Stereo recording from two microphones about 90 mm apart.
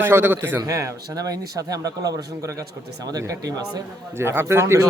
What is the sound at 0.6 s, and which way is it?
Speech, 35° right (ahead or behind).